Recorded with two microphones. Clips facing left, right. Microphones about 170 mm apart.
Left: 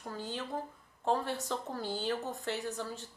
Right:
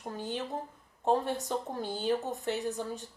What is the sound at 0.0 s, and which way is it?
A woman's voice, 20° right (ahead or behind).